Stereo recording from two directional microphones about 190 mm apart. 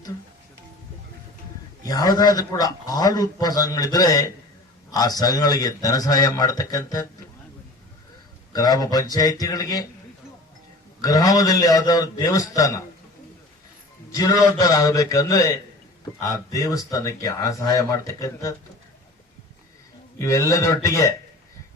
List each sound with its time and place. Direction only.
1.8 s a man's voice: 20° left (ahead or behind)
8.5 s a man's voice: 20° left (ahead or behind)
11.0 s a man's voice: 20° left (ahead or behind)
14.1 s speech: 15° left (ahead or behind)
20.1 s speech: 15° left (ahead or behind)